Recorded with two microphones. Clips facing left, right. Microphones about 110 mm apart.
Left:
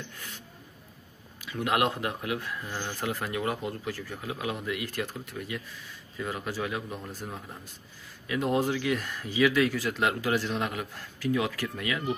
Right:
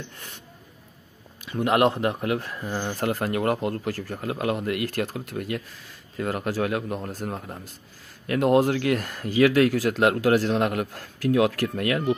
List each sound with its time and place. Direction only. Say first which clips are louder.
1.5 s speech: right 6 dB; 35° right (ahead or behind)
2.2 s speech: right 6 dB; 50° right (ahead or behind)
2.5 s speech: right 6 dB; 40° right (ahead or behind); by 3.9 s 60° right (ahead or behind)
3.9 s speech: right 6 dB; 45° right (ahead or behind)
8.3 s speech: right 7 dB; 65° right (ahead or behind)